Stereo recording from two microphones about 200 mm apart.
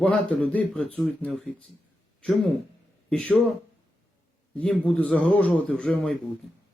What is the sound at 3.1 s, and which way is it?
Speech, 5° left (ahead or behind).